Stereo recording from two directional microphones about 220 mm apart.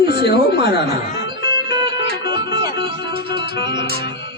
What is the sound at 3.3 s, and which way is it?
Music, 50° left (ahead or behind).